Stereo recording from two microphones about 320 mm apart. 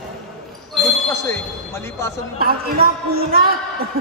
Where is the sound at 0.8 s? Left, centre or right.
Centre.